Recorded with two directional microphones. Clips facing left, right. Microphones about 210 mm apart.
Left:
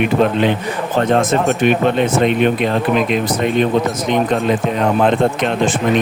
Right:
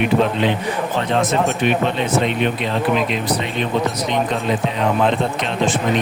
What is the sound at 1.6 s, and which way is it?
Speech, 50° left (ahead or behind).